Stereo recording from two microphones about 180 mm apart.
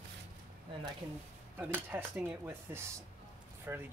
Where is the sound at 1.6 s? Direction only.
10° right (ahead or behind).